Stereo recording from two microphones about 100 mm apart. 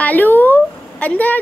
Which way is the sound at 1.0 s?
15° left (ahead or behind).